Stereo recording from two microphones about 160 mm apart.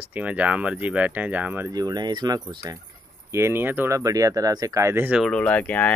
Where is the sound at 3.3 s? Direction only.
15° right (ahead or behind).